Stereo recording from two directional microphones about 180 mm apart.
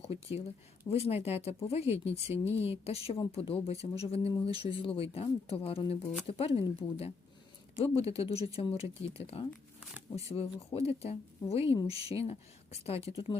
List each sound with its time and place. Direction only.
0.0 s speech: 35° left (ahead or behind)
2.3 s speech: 15° right (ahead or behind)
2.6 s speech: 35° left (ahead or behind)